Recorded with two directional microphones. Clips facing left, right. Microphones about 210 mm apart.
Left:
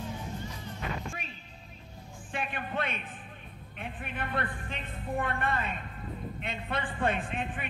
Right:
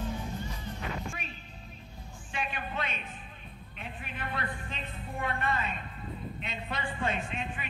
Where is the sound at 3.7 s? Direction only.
55° left (ahead or behind).